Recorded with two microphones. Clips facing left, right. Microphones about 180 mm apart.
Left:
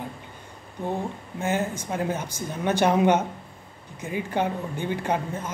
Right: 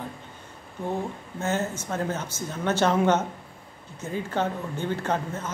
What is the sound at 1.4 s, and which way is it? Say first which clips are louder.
A woman's voice: left 1 dB; 10° left (ahead or behind).